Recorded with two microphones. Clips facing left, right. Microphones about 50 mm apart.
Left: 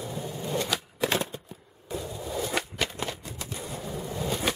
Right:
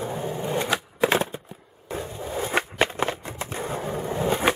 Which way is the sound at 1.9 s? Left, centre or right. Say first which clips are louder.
Right 3 dB; right.